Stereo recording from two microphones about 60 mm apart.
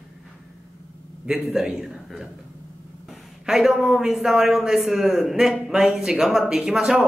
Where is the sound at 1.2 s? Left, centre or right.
Centre.